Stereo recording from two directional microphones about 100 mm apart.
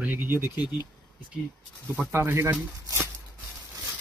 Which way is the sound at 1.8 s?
20° right (ahead or behind).